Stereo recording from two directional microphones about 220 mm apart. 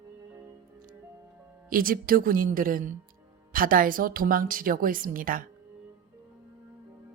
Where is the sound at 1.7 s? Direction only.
40° right (ahead or behind).